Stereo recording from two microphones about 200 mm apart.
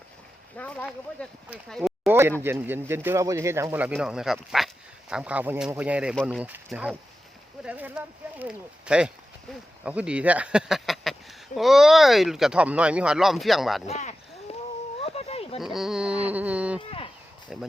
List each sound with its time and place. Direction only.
0.5 s speech: 5° left (ahead or behind)
13.8 s speech: 35° left (ahead or behind)
15.0 s a sound: 30° left (ahead or behind)
15.6 s speech: centre (ahead or behind)